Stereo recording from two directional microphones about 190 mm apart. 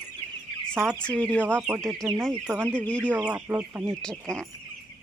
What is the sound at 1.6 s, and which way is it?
Speech, 5° right (ahead or behind).